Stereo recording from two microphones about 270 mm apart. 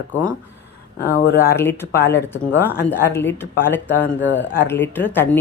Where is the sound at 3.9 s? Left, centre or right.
Left.